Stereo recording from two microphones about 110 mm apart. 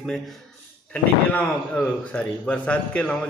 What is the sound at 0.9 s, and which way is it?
A man's voice, 15° left (ahead or behind).